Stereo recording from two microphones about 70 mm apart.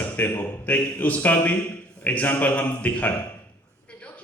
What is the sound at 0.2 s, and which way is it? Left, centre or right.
A man's voice, left.